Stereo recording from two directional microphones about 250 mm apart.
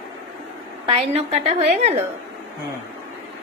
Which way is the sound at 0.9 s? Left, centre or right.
Right.